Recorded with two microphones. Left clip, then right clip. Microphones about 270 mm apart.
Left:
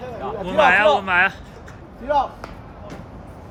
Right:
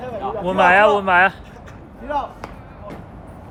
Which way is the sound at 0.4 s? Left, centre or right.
Centre.